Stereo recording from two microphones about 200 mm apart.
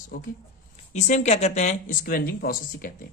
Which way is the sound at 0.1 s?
45° left (ahead or behind).